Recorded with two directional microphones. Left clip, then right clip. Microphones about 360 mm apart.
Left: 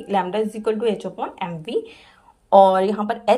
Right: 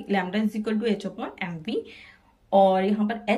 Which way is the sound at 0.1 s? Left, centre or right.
Centre.